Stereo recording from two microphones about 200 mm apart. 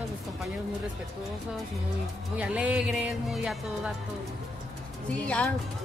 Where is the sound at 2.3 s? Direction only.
5° right (ahead or behind).